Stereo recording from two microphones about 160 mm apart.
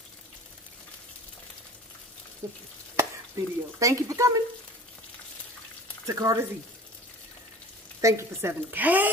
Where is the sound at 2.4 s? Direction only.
20° right (ahead or behind).